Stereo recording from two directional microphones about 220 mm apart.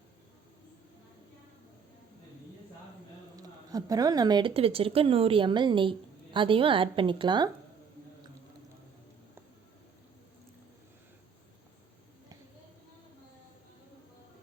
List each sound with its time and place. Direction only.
3.3 s speech: 15° right (ahead or behind)